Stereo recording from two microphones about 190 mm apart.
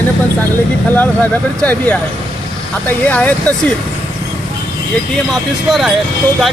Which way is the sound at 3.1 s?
5° left (ahead or behind).